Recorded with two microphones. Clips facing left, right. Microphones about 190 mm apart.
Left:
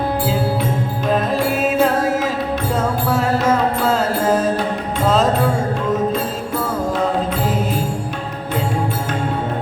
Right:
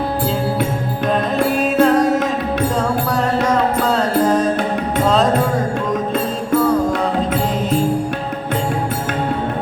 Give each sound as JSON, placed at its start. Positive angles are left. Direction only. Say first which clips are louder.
{"t": 1.1, "sound": "music", "louder": "right 1 dB", "side_deg": 5}